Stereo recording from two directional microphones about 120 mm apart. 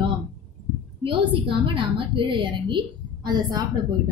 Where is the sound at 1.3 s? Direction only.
45° right (ahead or behind).